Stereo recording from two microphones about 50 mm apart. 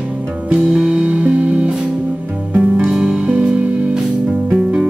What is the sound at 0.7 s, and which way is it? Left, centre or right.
Music, centre.